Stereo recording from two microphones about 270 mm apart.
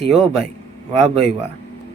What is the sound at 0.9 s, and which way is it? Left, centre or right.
Speech, right.